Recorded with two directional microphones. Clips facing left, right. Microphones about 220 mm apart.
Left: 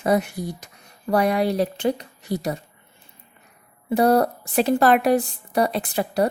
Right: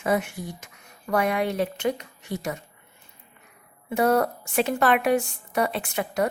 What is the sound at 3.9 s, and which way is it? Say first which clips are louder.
A woman's voice: left 4 dB; 35° left (ahead or behind).